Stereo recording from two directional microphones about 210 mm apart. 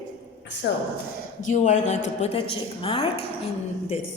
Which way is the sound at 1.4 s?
35° left (ahead or behind).